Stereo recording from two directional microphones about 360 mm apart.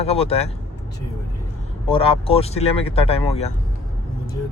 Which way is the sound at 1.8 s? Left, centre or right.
Centre.